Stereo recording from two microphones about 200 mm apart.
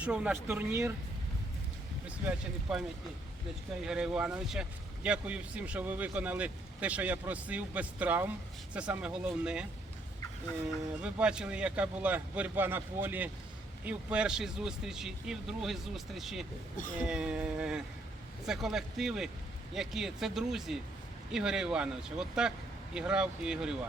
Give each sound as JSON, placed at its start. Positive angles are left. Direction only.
{"t": 0.0, "sound": "speech", "side_deg": -5}
{"t": 2.0, "sound": "speech", "side_deg": -5}
{"t": 3.8, "sound": "speech", "side_deg": -5}
{"t": 11.0, "sound": "speech", "side_deg": -5}